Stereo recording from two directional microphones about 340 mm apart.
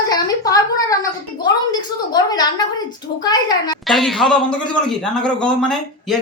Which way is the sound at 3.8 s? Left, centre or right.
Centre.